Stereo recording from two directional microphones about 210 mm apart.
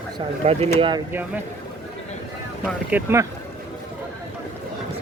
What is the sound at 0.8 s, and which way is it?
Speech, 20° right (ahead or behind).